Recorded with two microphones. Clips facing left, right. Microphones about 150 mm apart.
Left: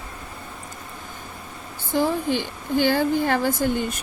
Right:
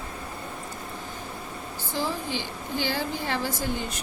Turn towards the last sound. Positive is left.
turn(degrees=50)  # may be behind; listen again after turning